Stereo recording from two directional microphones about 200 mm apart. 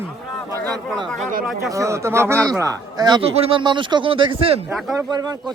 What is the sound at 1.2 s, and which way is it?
Speech, 45° right (ahead or behind).